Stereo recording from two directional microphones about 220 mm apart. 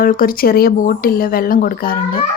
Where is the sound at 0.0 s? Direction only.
40° left (ahead or behind).